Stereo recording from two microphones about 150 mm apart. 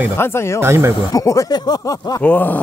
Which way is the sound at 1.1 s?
20° left (ahead or behind).